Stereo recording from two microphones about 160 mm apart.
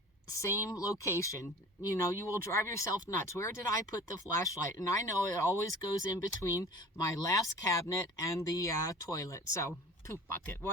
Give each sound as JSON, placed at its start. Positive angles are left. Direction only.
{"t": 0.3, "sound": "speech", "side_deg": 20}